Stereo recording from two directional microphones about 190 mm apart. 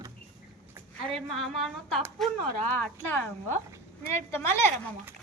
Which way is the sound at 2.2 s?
5° left (ahead or behind).